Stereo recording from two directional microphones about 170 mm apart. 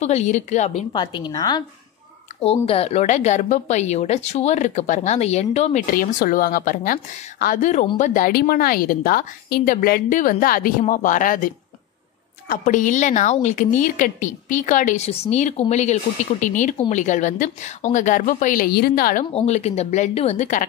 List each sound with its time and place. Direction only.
0.0 s a woman's voice: 40° left (ahead or behind)
0.9 s a woman's voice: 25° left (ahead or behind)
2.4 s a woman's voice: 35° left (ahead or behind)
5.9 s a woman's voice: 55° left (ahead or behind)
19.3 s a woman's voice: 40° left (ahead or behind)